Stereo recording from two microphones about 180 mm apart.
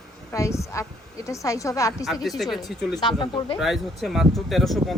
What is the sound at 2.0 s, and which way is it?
Speech, centre (ahead or behind).